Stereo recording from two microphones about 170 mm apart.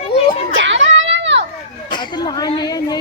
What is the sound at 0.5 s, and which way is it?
Children playing, 90° right.